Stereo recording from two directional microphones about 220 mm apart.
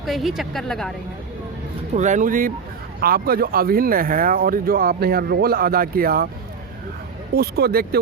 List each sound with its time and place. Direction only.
0.0 s a woman's voice: centre (ahead or behind)
1.9 s speech: 35° right (ahead or behind)
7.3 s speech: 45° right (ahead or behind)